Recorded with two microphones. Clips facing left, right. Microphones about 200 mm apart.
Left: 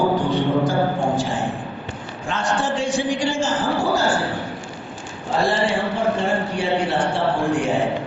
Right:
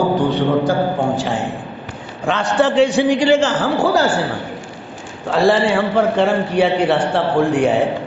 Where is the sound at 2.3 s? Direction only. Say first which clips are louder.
Right 7 dB; 65° right (ahead or behind).